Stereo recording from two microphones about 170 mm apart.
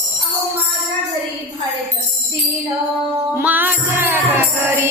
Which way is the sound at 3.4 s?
10° right (ahead or behind).